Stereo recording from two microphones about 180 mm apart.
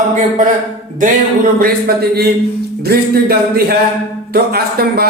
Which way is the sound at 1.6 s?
55° right (ahead or behind).